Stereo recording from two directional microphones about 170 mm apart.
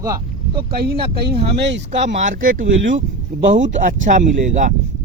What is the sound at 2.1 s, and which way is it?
Speech, 50° right (ahead or behind).